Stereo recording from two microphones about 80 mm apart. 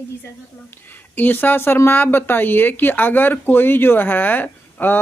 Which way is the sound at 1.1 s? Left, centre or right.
Left.